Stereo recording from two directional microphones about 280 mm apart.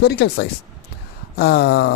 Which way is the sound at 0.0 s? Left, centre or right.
Left.